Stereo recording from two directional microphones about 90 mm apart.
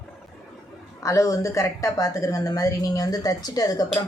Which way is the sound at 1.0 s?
35° left (ahead or behind).